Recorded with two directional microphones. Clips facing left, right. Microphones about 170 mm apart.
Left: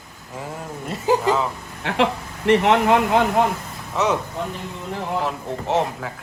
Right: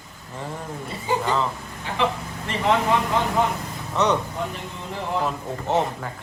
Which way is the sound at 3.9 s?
5° left (ahead or behind).